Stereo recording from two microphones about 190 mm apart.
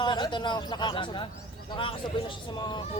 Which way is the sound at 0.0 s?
25° left (ahead or behind).